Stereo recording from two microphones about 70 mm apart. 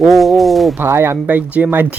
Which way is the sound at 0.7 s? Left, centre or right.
Right.